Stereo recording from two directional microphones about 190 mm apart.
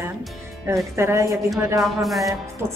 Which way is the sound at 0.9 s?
15° right (ahead or behind).